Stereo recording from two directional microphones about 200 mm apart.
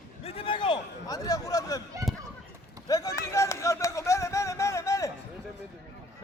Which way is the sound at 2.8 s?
15° left (ahead or behind).